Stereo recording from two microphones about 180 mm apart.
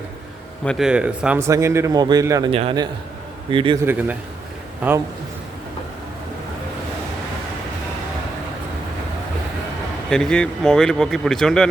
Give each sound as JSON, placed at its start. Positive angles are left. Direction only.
{"t": 0.6, "sound": "speech", "side_deg": 0}
{"t": 2.5, "sound": "a man's voice", "side_deg": -30}
{"t": 3.8, "sound": "speech", "side_deg": -10}
{"t": 10.1, "sound": "speech", "side_deg": 5}